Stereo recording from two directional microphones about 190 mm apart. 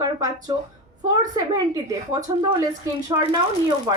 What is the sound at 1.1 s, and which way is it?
Speech, 20° right (ahead or behind).